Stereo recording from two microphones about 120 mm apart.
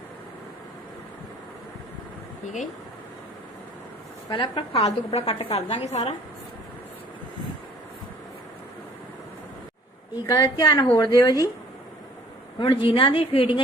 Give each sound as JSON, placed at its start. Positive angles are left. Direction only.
{"t": 4.3, "sound": "a woman's voice", "side_deg": 45}
{"t": 4.8, "sound": "a woman's voice", "side_deg": 55}
{"t": 10.2, "sound": "a woman's voice", "side_deg": 30}
{"t": 12.5, "sound": "a woman's voice", "side_deg": 45}